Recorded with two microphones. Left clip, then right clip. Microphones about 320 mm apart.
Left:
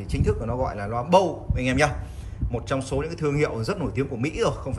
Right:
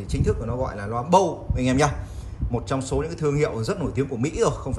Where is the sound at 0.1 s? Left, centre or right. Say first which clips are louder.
Even; centre.